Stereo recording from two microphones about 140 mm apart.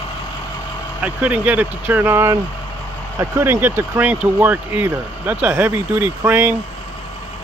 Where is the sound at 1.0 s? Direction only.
10° right (ahead or behind).